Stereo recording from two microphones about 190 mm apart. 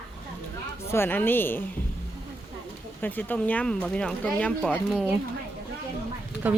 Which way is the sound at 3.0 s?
10° left (ahead or behind).